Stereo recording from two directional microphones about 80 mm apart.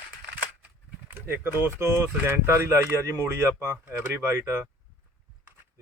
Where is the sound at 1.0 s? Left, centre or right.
Right.